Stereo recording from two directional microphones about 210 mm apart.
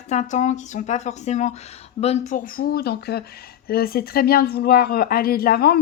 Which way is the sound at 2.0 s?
30° left (ahead or behind).